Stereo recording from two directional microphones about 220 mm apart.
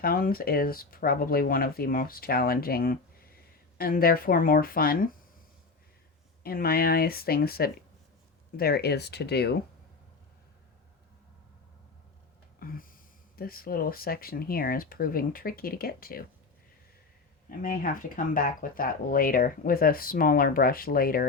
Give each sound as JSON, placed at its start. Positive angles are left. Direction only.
{"t": 0.0, "sound": "speech", "side_deg": 40}
{"t": 6.4, "sound": "speech", "side_deg": 45}
{"t": 12.5, "sound": "speech", "side_deg": 40}
{"t": 17.6, "sound": "speech", "side_deg": 40}